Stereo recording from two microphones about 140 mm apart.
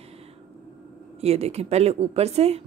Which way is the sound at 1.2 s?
50° right (ahead or behind).